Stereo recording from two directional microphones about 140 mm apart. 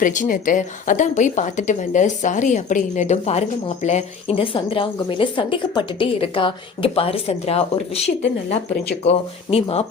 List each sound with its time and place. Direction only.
0.0 s a woman's voice: 70° left (ahead or behind); by 9.8 s 45° left (ahead or behind)